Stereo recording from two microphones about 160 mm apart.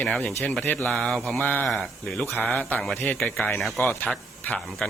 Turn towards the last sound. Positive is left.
turn(degrees=5)  # may be behind; listen again after turning